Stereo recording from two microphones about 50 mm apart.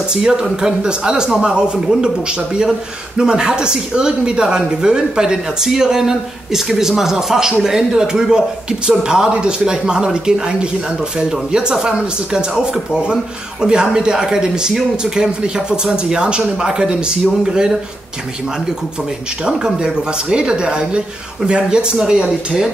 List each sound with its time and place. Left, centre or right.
0.1 s speech: centre
19.4 s speech: centre